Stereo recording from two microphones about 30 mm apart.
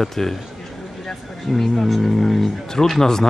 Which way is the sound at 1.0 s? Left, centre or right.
Centre.